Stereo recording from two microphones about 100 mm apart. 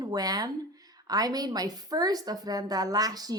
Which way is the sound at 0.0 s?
40° right (ahead or behind).